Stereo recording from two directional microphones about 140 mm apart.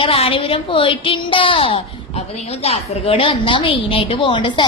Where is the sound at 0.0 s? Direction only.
40° left (ahead or behind).